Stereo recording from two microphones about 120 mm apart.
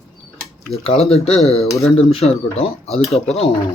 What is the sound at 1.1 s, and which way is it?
Speech, 60° left (ahead or behind).